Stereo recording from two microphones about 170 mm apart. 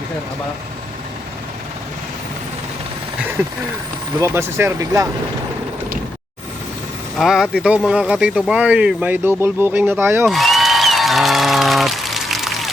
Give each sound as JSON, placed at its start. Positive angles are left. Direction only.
{"t": 4.2, "sound": "speech", "side_deg": -15}
{"t": 7.2, "sound": "speech", "side_deg": -5}
{"t": 10.2, "sound": "applause", "side_deg": 0}